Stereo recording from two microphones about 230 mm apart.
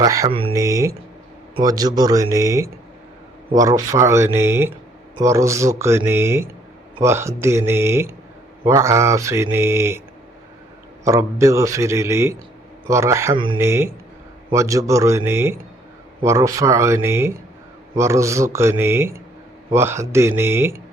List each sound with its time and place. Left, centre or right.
0.0 s a man's voice: centre
11.0 s speech: centre